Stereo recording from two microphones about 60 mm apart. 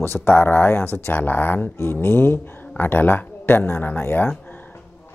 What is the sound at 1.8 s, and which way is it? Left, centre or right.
Speech, left.